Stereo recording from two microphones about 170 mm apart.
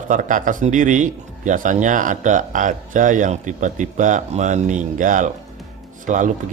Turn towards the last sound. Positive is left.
turn(degrees=-50)  # may be behind; listen again after turning